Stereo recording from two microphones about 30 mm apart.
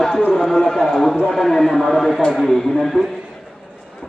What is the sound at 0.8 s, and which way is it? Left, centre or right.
Speech, centre.